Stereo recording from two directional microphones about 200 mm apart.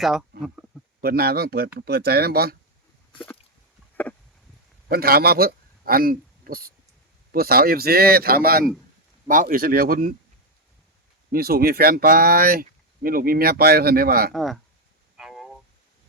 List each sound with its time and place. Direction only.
0.0 s speech: centre (ahead or behind)
1.0 s speech: 50° right (ahead or behind)
4.9 s a man's voice: 50° right (ahead or behind)
11.3 s speech: 50° right (ahead or behind)
14.3 s speech: centre (ahead or behind)
15.2 s vehicle: centre (ahead or behind)